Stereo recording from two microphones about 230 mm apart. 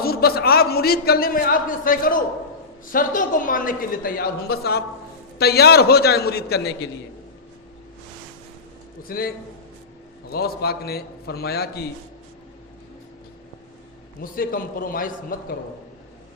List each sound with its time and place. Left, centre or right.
0.0 s a man's voice: left
9.0 s a man's voice: left
14.2 s a man's voice: left